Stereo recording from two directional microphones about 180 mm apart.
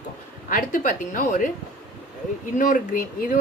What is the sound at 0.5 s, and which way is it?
Speech, 50° left (ahead or behind).